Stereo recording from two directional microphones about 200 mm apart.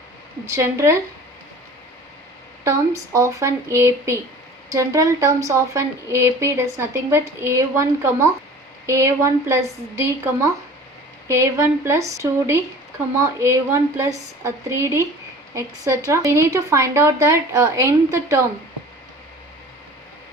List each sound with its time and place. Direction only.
0.5 s a woman's voice: 15° right (ahead or behind)
2.6 s a woman's voice: 15° right (ahead or behind)
11.3 s a woman's voice: 15° right (ahead or behind)